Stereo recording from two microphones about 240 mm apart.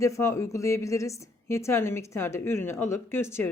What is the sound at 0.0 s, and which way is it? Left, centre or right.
A woman's voice, centre.